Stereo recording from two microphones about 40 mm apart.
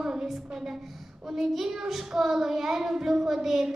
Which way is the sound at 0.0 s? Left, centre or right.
Centre.